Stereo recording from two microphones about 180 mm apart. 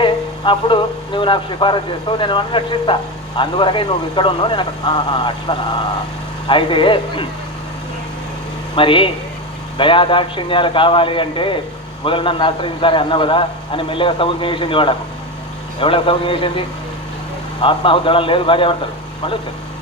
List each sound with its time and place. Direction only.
0.0 s speech: 30° left (ahead or behind)
8.7 s speech: 30° left (ahead or behind)
17.6 s speech: 30° left (ahead or behind)